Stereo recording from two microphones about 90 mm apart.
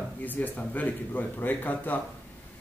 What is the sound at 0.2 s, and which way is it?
Speech, 20° left (ahead or behind).